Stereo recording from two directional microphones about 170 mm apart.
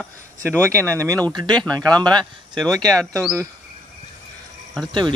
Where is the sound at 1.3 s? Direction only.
25° right (ahead or behind).